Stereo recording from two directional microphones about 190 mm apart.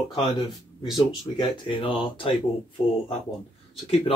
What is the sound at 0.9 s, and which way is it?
Speech, 25° left (ahead or behind).